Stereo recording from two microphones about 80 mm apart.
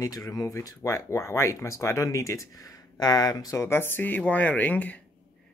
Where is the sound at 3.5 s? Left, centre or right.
Left.